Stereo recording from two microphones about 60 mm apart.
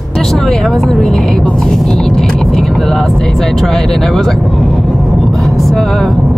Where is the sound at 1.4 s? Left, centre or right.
Centre.